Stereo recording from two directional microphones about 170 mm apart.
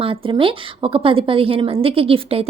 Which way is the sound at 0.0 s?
30° right (ahead or behind).